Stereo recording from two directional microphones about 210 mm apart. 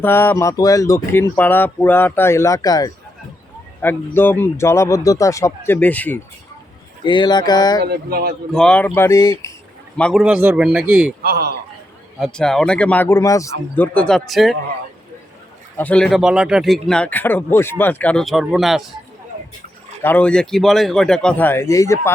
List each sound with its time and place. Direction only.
0.0 s speech: 10° left (ahead or behind)
7.0 s a sound: 20° left (ahead or behind)
7.9 s speech: 50° right (ahead or behind)
8.5 s speech: 5° left (ahead or behind)
10.0 s speech: centre (ahead or behind)
11.2 s speech: 50° right (ahead or behind)
12.2 s speech: 5° left (ahead or behind)
15.8 s speech: 5° left (ahead or behind)
20.0 s speech: 10° left (ahead or behind)